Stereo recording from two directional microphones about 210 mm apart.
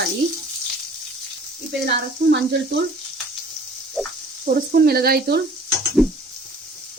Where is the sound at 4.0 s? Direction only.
Centre (ahead or behind).